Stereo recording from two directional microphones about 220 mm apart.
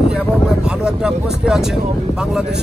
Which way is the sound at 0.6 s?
5° right (ahead or behind).